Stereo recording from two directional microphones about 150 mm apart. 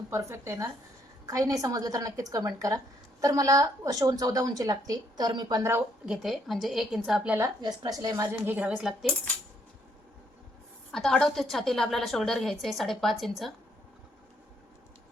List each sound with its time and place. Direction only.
0.1 s speech: 20° right (ahead or behind)
6.1 s a woman's voice: centre (ahead or behind)
7.3 s a woman's voice: 25° right (ahead or behind); by 9.1 s centre (ahead or behind)
10.9 s a woman's voice: 5° left (ahead or behind)